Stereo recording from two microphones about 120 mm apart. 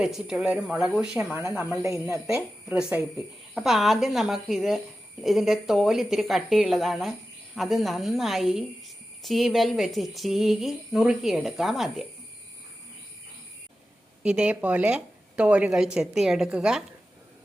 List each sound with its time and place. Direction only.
0.0 s a woman's voice: 5° right (ahead or behind)
1.4 s speech: 20° right (ahead or behind)
2.6 s a woman's voice: 10° right (ahead or behind)
14.3 s a woman's voice: 10° right (ahead or behind)